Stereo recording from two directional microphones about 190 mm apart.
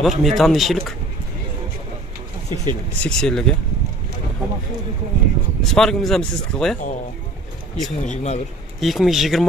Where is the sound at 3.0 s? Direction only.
5° left (ahead or behind).